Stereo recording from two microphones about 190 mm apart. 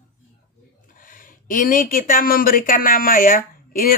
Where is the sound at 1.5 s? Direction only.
45° left (ahead or behind).